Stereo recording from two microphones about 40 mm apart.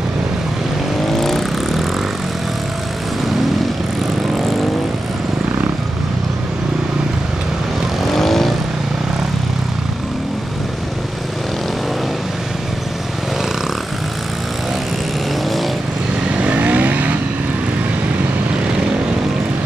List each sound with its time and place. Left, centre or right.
1.1 s vehicle: centre
8.1 s vehicle: centre
16.3 s vehicle: right